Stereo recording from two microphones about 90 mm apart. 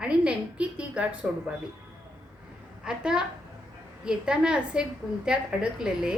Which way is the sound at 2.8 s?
5° right (ahead or behind).